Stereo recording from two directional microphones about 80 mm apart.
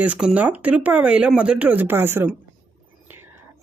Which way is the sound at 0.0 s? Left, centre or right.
Centre.